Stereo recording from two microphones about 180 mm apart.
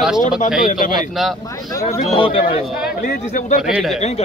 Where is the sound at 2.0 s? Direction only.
30° left (ahead or behind).